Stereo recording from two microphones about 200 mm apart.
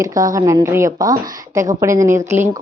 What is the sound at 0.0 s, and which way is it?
Speech, 15° right (ahead or behind).